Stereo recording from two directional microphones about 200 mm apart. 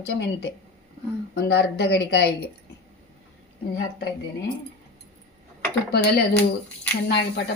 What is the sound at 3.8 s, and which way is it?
Speech, 55° left (ahead or behind).